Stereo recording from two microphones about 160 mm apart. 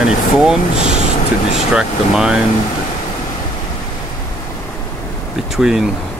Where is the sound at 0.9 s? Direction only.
35° left (ahead or behind).